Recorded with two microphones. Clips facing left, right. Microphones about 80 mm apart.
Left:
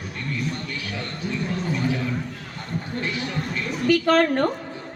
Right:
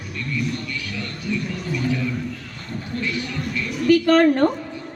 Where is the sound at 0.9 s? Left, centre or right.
Left.